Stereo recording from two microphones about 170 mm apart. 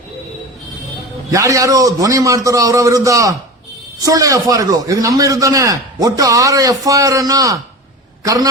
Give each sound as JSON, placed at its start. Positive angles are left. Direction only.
{"t": 1.3, "sound": "a man's voice", "side_deg": -20}